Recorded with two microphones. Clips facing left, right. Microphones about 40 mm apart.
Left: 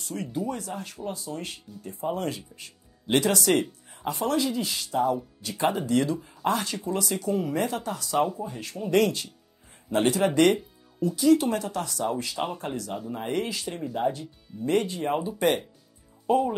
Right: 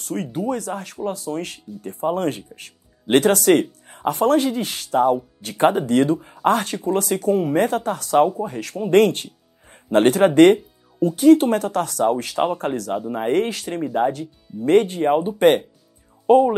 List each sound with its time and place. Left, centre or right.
0.0 s speech: right